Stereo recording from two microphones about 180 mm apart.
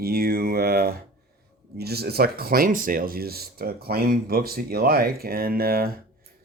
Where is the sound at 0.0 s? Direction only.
55° right (ahead or behind).